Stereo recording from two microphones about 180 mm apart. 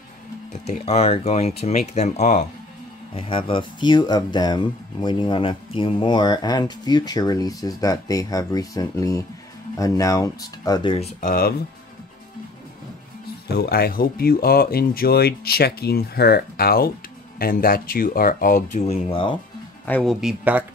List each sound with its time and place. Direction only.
0.5 s speech: 35° left (ahead or behind)
3.2 s speech: 30° left (ahead or behind); by 11.5 s 50° left (ahead or behind)
13.5 s speech: 60° left (ahead or behind); by 19.3 s 30° left (ahead or behind)
19.9 s speech: 5° left (ahead or behind)
20.2 s speech: 5° right (ahead or behind)